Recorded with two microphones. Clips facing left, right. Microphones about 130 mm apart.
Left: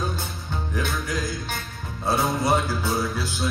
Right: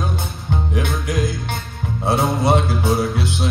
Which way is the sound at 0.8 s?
20° right (ahead or behind).